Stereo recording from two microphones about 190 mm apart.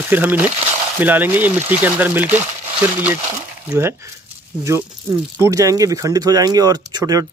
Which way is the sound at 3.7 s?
15° right (ahead or behind).